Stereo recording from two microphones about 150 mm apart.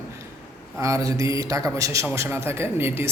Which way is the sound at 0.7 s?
20° right (ahead or behind).